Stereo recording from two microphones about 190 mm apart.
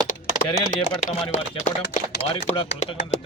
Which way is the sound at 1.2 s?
35° left (ahead or behind).